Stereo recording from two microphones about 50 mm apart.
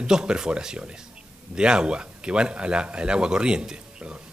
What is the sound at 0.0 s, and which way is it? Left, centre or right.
A man's voice, centre.